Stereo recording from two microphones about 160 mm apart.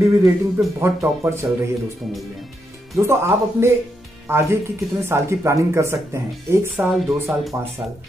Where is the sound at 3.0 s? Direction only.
15° right (ahead or behind).